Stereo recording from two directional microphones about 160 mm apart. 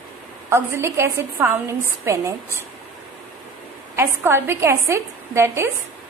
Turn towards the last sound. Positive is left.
turn(degrees=-15)  # may be behind; listen again after turning